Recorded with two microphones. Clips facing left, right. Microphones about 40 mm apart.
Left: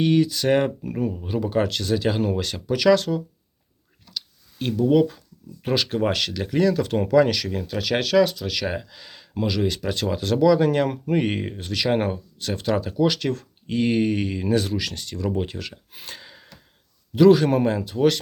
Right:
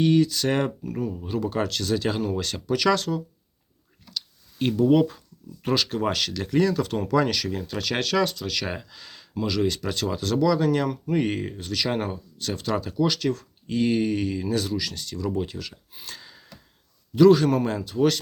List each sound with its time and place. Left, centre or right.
0.0 s speech: centre
0.9 s speech: left
1.2 s speech: centre
4.5 s speech: centre
5.6 s speech: centre
10.6 s speech: left
11.1 s speech: left
12.4 s speech: centre; by 15.8 s left
16.0 s gasp: left
17.2 s speech: left